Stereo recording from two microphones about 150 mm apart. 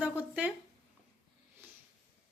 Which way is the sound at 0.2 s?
10° right (ahead or behind).